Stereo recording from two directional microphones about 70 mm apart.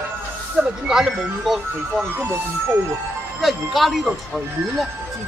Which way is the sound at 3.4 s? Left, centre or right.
Centre.